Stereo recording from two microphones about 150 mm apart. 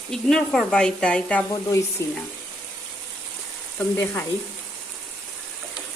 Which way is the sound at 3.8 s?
10° left (ahead or behind).